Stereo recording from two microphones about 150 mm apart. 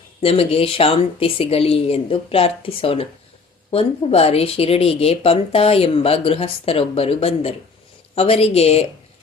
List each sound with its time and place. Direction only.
0.2 s speech: 40° left (ahead or behind)